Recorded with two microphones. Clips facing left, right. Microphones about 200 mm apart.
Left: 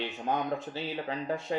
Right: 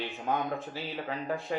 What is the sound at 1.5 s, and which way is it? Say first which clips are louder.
Speech: left 2 dB; 30° left (ahead or behind).